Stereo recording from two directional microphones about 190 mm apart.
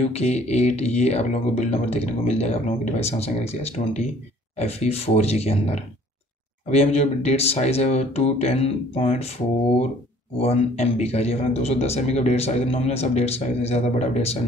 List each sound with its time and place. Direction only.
0.1 s a man's voice: 35° left (ahead or behind)
10.4 s a man's voice: 35° left (ahead or behind)